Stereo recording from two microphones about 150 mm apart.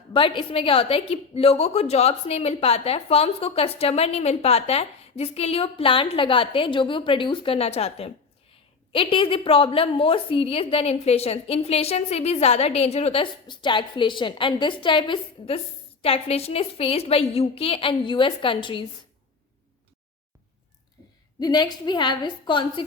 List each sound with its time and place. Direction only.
0.1 s a woman's voice: 35° left (ahead or behind)
21.4 s a woman's voice: 25° left (ahead or behind)